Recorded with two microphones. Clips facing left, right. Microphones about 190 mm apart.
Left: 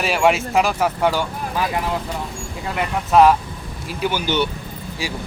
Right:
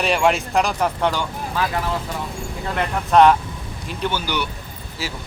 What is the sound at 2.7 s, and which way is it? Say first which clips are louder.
Speech: even; 5° left (ahead or behind).